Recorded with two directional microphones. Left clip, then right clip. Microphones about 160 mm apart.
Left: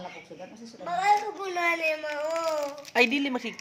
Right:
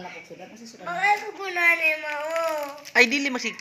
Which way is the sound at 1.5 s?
90° left.